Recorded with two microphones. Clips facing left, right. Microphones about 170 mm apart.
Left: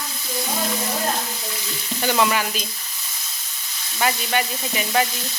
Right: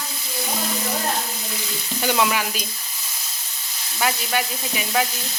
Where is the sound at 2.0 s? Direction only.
5° right (ahead or behind).